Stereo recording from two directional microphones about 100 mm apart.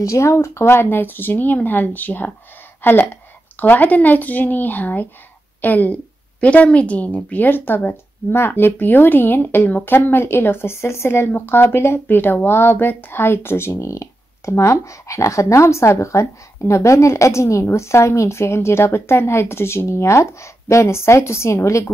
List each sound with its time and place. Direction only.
0.0 s a woman's voice: 30° left (ahead or behind)